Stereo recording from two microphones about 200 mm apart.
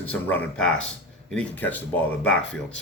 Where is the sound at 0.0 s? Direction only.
10° left (ahead or behind).